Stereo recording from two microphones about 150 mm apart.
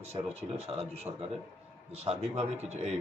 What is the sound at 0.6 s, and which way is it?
Speech, 45° right (ahead or behind).